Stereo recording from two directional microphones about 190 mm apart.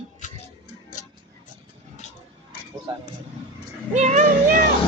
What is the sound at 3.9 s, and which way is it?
Music, 40° right (ahead or behind).